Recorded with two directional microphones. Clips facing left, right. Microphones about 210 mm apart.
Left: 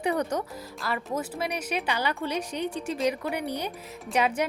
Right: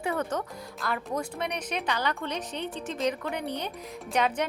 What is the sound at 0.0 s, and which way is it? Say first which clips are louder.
Speech: left 3 dB; 15° left (ahead or behind).